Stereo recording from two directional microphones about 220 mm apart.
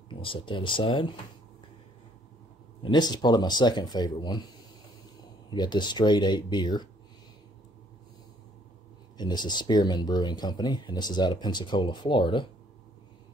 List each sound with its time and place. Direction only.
0.1 s speech: 25° left (ahead or behind)
2.8 s speech: 20° left (ahead or behind)
5.5 s speech: 20° left (ahead or behind)
9.1 s speech: 20° left (ahead or behind)